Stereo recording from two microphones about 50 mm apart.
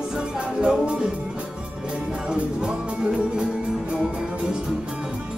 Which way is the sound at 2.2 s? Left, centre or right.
Centre.